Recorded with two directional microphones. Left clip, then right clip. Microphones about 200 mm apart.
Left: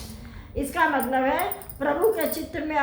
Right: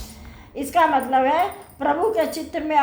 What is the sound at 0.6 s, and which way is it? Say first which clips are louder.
A woman's voice: right 5 dB; 40° right (ahead or behind).